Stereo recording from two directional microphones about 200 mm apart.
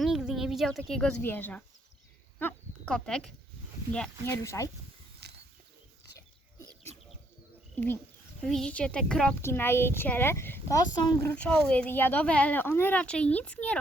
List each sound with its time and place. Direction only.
0.0 s speech: centre (ahead or behind); by 4.7 s 15° left (ahead or behind)
5.2 s a sound: 55° right (ahead or behind)
8.4 s speech: 5° left (ahead or behind)